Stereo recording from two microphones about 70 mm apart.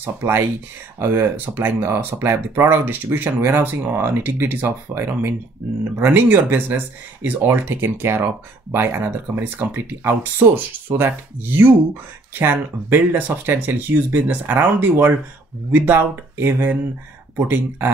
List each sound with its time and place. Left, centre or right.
0.0 s speech: right